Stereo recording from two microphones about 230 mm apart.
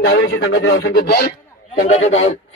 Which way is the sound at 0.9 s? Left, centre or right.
Left.